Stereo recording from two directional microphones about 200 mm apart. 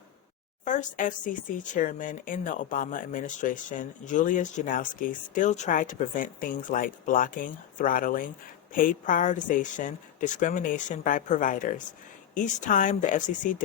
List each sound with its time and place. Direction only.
0.6 s speech: 40° left (ahead or behind)